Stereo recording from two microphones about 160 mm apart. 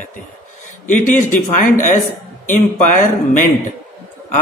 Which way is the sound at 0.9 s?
55° left (ahead or behind).